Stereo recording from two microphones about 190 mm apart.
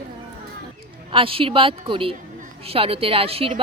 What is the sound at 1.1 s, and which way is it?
A woman's voice, 30° right (ahead or behind).